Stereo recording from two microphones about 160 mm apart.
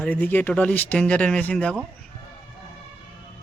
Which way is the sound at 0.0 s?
10° left (ahead or behind).